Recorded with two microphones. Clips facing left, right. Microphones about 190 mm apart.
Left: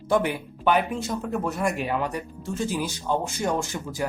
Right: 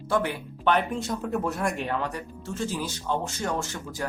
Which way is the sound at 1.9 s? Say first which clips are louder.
Left 3 dB; 15° left (ahead or behind).